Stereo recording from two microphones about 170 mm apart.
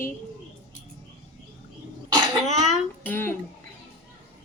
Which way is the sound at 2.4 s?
45° left (ahead or behind).